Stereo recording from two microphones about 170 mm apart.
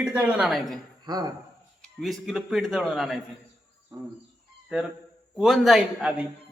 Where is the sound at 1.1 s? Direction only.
25° right (ahead or behind).